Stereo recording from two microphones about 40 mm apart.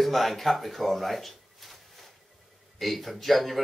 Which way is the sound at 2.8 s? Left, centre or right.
Centre.